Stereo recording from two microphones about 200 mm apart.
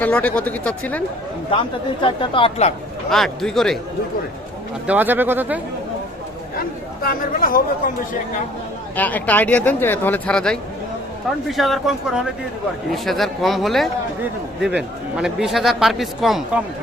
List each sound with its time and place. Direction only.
0.0 s speech: 5° left (ahead or behind)
2.0 s a woman's voice: 25° left (ahead or behind)
3.1 s a man's voice: centre (ahead or behind)
4.9 s speech: 10° right (ahead or behind)
6.6 s speech: 45° left (ahead or behind)
9.0 s a man's voice: 10° left (ahead or behind)